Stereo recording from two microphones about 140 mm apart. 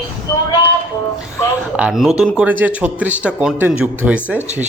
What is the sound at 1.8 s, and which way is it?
Speech, 5° right (ahead or behind).